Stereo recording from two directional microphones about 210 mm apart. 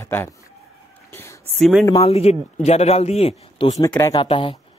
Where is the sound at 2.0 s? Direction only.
30° left (ahead or behind).